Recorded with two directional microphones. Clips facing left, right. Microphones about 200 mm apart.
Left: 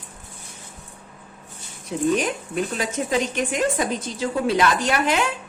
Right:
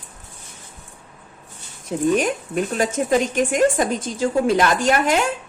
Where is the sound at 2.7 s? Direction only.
50° right (ahead or behind).